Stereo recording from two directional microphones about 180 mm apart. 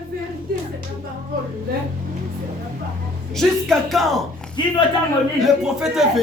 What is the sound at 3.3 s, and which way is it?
Speech, centre (ahead or behind).